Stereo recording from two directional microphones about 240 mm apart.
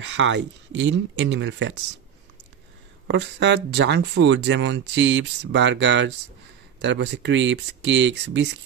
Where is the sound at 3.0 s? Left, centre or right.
Right.